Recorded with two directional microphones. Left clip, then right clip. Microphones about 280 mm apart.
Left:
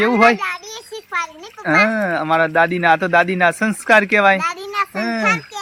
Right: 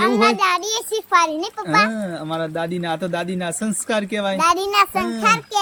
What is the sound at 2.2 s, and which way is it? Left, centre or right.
Speech, centre.